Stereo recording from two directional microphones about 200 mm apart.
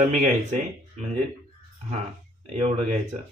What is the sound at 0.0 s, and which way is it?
Speech, 40° right (ahead or behind).